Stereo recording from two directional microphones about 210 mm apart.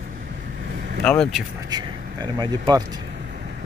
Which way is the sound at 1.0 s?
5° left (ahead or behind).